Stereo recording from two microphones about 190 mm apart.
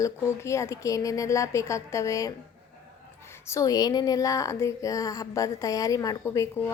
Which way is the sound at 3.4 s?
15° left (ahead or behind).